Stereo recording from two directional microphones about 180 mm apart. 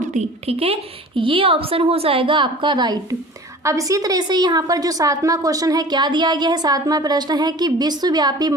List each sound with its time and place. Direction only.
0.0 s a woman's voice: 40° right (ahead or behind); by 8.5 s 20° right (ahead or behind)